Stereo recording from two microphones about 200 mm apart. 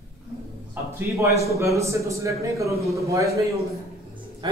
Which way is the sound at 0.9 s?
10° right (ahead or behind).